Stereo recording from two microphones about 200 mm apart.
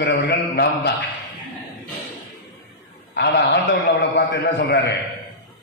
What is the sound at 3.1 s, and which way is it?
A man's voice, 55° left (ahead or behind).